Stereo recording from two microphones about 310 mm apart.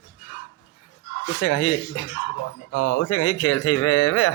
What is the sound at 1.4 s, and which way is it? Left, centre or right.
Speech, left.